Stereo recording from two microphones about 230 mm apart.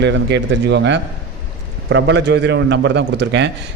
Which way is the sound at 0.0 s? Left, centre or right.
Right.